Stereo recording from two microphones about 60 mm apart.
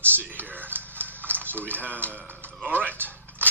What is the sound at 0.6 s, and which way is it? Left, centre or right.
Horse, right.